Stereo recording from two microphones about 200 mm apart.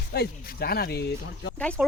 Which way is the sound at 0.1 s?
50° left (ahead or behind).